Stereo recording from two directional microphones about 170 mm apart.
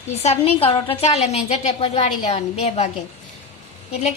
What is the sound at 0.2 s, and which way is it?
A woman's voice, 40° left (ahead or behind).